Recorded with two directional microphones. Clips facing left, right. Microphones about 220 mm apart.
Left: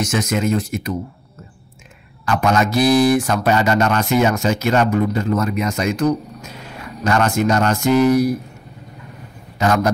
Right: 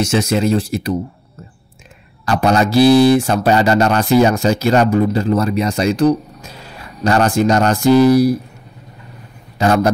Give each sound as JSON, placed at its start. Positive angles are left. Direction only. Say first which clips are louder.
{"t": 0.0, "sound": "speech", "louder": "right 4 dB", "side_deg": -30}
{"t": 2.2, "sound": "speech", "louder": "right 3 dB", "side_deg": -35}
{"t": 9.6, "sound": "speech", "louder": "right 3 dB", "side_deg": -35}